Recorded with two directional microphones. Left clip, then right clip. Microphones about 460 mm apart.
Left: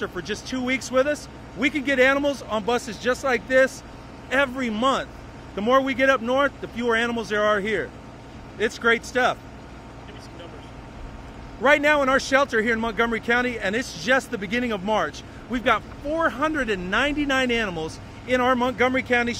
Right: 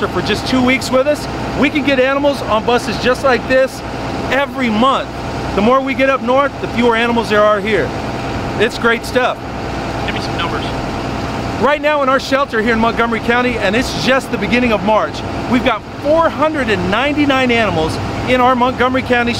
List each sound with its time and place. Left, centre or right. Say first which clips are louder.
0.0 s speech: right 13 dB; left
11.6 s speech: right 5 dB; left